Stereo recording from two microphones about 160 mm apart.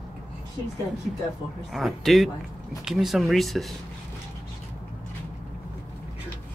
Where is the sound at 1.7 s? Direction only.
Centre (ahead or behind).